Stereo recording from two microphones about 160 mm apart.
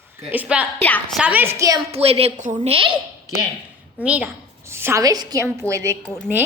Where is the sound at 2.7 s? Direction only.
35° right (ahead or behind).